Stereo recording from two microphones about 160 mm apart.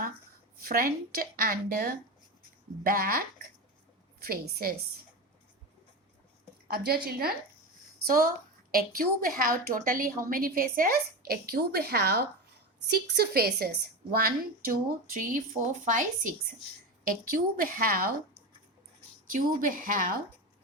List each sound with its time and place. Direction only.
0.6 s a woman's voice: 70° right (ahead or behind)
6.7 s a woman's voice: 70° right (ahead or behind)
19.3 s a woman's voice: 60° right (ahead or behind)